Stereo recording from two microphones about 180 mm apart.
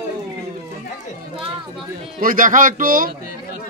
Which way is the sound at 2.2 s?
50° right (ahead or behind).